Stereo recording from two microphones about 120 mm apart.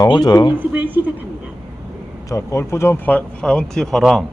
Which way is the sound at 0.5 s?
15° right (ahead or behind).